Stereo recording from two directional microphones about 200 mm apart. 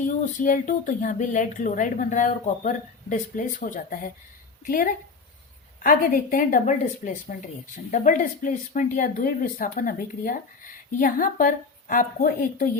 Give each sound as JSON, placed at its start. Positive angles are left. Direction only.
{"t": 0.0, "sound": "a woman's voice", "side_deg": 40}